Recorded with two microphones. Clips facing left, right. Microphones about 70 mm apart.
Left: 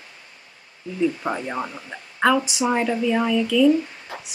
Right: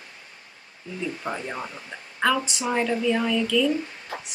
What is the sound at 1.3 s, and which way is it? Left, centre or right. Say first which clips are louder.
Speech: left 5 dB; centre.